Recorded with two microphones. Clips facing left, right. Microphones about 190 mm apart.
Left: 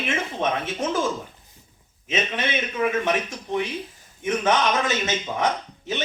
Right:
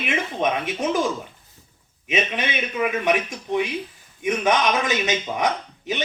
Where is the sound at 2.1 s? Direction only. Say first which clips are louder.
Right 1 dB; 15° right (ahead or behind).